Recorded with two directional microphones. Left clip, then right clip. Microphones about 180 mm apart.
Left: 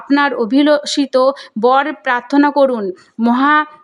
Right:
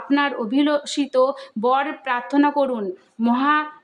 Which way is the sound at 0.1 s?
40° left (ahead or behind).